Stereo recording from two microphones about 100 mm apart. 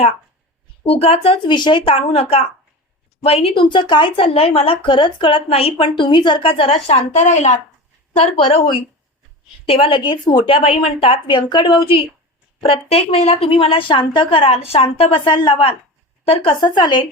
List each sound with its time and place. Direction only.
0.9 s a woman's voice: 75° left (ahead or behind)
6.0 s a woman's voice: 50° left (ahead or behind); by 7.0 s 90° left
8.2 s a woman's voice: 75° left (ahead or behind)
16.6 s a woman's voice: 50° left (ahead or behind)